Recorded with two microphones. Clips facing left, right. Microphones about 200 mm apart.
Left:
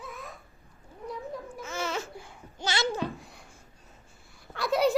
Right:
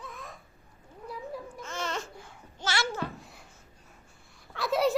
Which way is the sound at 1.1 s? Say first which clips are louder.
Left 1 dB; 5° left (ahead or behind).